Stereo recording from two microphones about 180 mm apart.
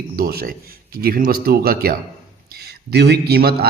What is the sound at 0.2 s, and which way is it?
A man's voice, 55° right (ahead or behind).